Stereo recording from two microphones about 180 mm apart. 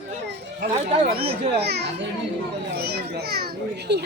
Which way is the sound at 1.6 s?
65° right (ahead or behind).